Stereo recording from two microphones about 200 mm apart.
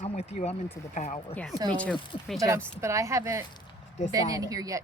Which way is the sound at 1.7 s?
5° left (ahead or behind).